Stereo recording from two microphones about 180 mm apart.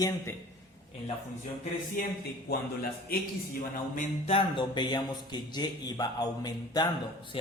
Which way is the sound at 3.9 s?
45° left (ahead or behind).